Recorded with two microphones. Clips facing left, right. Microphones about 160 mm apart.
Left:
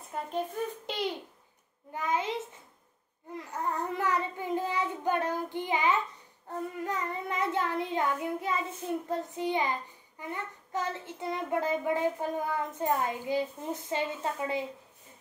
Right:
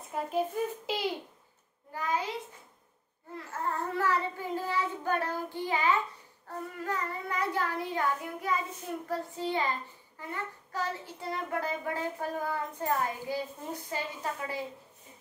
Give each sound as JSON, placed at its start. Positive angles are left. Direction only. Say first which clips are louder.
{"t": 0.1, "sound": "a child's voice", "louder": "right 2 dB", "side_deg": 0}
{"t": 1.9, "sound": "a child's voice", "louder": "left 1 dB", "side_deg": 20}
{"t": 3.3, "sound": "a child's voice", "louder": "left 1 dB", "side_deg": 15}